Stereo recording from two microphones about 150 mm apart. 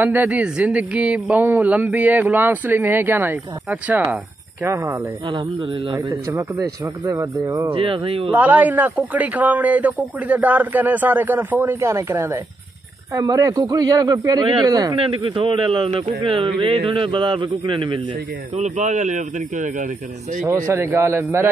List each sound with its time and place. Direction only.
0.0 s speech: 10° right (ahead or behind)
4.6 s speech: 20° right (ahead or behind)
6.2 s speech: 20° right (ahead or behind)
7.7 s a man's voice: 35° right (ahead or behind)
8.3 s speech: 10° right (ahead or behind); by 15.0 s 25° right (ahead or behind)
15.3 s a man's voice: 35° right (ahead or behind)
18.6 s speech: 55° right (ahead or behind)
20.4 s speech: 20° right (ahead or behind)